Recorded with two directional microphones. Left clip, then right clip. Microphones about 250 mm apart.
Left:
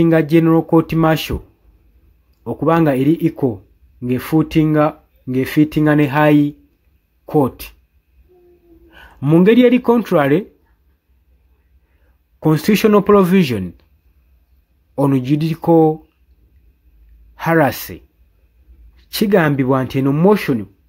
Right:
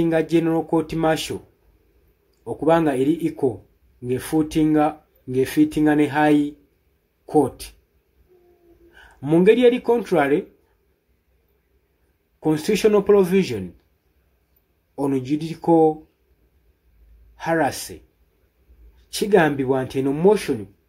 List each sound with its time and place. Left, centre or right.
0.0 s speech: left
2.4 s speech: left
8.9 s a man's voice: left
12.4 s speech: left
15.0 s speech: left
17.4 s speech: left
19.0 s speech: left